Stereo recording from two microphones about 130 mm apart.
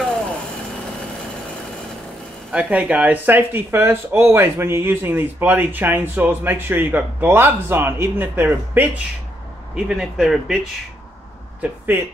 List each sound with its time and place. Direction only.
2.5 s speech: 10° right (ahead or behind)
9.8 s a man's voice: 5° right (ahead or behind)
11.6 s speech: 15° right (ahead or behind)